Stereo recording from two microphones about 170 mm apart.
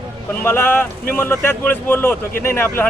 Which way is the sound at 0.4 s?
15° left (ahead or behind).